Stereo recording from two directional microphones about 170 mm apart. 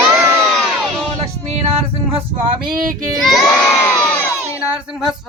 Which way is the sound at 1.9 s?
30° right (ahead or behind).